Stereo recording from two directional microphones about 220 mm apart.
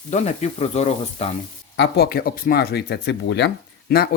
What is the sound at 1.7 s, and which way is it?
Speech, 50° left (ahead or behind).